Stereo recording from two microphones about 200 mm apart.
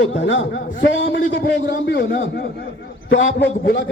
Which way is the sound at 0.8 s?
60° left (ahead or behind).